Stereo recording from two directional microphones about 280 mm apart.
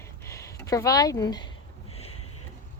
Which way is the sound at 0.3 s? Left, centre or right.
Centre.